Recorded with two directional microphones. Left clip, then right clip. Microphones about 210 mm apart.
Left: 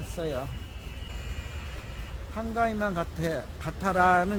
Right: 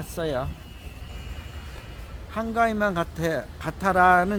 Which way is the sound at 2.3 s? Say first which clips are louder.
Right 5 dB; 40° right (ahead or behind).